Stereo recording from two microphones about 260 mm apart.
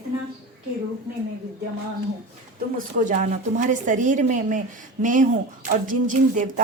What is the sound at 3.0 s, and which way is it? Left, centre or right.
A woman's voice, right.